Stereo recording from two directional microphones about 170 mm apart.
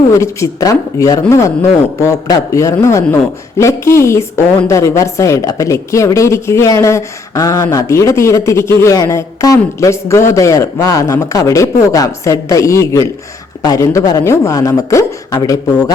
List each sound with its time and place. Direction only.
0.1 s a woman's voice: 15° left (ahead or behind)